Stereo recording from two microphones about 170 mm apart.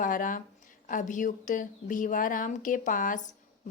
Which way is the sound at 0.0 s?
55° left (ahead or behind).